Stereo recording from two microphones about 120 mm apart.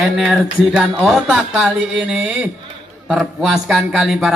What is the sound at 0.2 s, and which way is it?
Speech, centre (ahead or behind).